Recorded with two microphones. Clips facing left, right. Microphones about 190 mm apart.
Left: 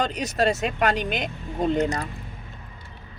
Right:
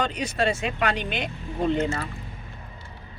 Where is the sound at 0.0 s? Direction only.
45° left (ahead or behind).